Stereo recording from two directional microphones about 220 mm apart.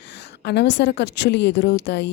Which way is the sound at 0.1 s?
50° left (ahead or behind).